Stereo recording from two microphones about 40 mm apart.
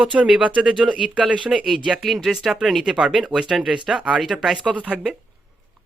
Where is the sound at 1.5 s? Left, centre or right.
Centre.